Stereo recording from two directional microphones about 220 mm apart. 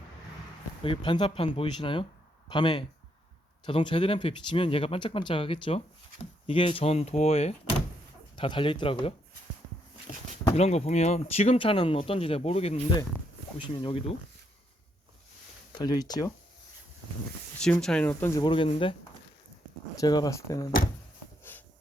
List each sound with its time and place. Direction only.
0.8 s speech: 20° left (ahead or behind)
10.6 s speech: 30° left (ahead or behind)
15.8 s speech: 20° left (ahead or behind)
17.6 s speech: 5° left (ahead or behind)
18.4 s speech: 25° left (ahead or behind)
20.0 s speech: 15° left (ahead or behind)